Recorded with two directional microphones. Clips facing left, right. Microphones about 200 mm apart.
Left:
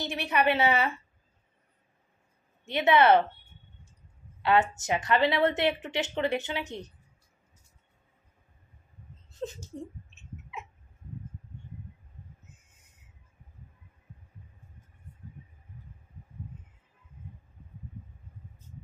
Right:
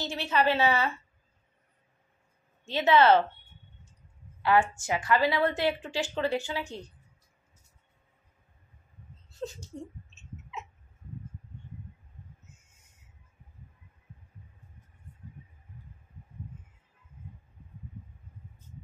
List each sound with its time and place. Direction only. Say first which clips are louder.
0.0 s a woman's voice: even; 15° left (ahead or behind)
2.6 s a woman's voice: even; 15° left (ahead or behind)
4.4 s a woman's voice: even; 25° left (ahead or behind)
9.3 s speech: left 1 dB; 20° left (ahead or behind)